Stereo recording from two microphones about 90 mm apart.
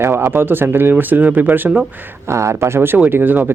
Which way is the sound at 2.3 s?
35° right (ahead or behind).